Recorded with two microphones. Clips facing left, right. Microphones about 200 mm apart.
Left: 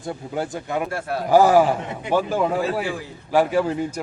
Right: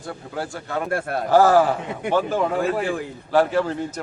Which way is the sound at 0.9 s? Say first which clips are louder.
Right 2 dB; 55° right (ahead or behind).